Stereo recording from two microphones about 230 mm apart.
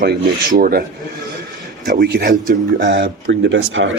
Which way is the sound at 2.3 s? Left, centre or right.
Right.